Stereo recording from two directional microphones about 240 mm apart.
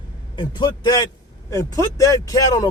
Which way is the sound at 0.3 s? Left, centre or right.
Centre.